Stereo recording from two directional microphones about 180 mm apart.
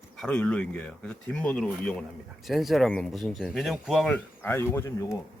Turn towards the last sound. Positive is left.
turn(degrees=15)  # may be behind; listen again after turning